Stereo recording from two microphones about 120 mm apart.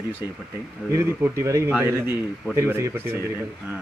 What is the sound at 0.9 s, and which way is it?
A man's voice, 25° right (ahead or behind).